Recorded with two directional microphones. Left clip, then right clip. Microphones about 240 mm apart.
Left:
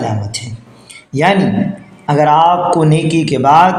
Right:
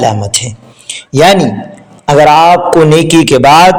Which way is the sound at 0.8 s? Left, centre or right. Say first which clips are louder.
Right 7 dB; right.